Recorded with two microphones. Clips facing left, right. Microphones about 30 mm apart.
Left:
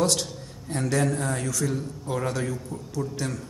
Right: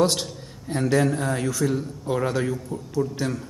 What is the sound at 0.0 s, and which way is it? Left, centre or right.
A man's voice, centre.